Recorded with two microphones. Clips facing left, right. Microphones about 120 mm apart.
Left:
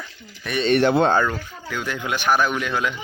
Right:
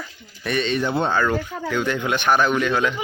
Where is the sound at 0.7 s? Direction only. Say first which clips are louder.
Left 8 dB; 90° left.